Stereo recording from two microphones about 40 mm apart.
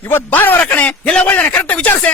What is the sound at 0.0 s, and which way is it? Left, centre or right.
Speech, left.